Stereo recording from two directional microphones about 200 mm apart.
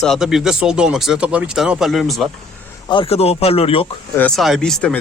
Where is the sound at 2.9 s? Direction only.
30° left (ahead or behind).